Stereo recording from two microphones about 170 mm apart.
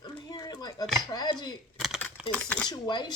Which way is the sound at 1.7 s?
Centre (ahead or behind).